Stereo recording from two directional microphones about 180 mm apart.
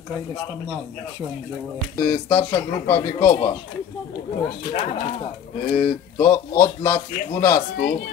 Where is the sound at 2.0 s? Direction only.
25° left (ahead or behind).